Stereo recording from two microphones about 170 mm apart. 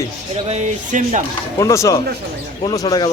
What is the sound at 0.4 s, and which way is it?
Speech, 40° right (ahead or behind).